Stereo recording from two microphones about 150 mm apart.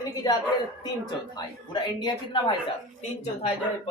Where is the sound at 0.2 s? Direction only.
25° left (ahead or behind).